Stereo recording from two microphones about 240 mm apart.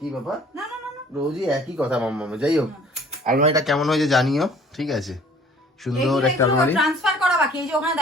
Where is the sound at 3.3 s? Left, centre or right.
Right.